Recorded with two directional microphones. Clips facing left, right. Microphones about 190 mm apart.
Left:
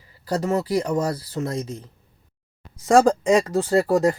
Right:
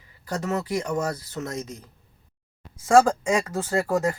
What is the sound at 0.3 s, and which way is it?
Speech, 35° left (ahead or behind).